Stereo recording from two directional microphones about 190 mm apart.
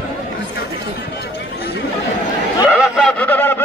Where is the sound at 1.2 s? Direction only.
60° left (ahead or behind).